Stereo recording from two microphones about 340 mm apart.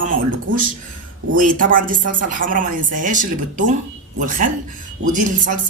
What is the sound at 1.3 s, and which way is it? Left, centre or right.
Speech, right.